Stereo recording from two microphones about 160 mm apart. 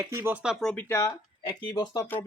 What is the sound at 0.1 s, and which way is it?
Speech, 15° right (ahead or behind).